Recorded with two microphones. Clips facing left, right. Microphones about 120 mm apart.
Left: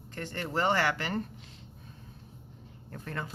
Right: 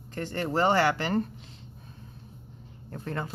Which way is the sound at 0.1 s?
35° right (ahead or behind).